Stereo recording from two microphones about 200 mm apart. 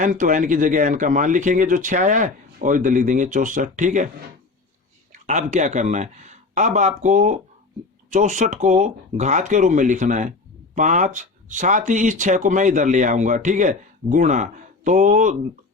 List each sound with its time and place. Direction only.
0.0 s speech: 40° right (ahead or behind)
5.2 s speech: 35° right (ahead or behind)